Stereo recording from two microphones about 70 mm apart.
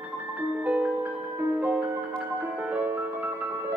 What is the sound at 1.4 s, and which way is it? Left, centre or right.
Music, right.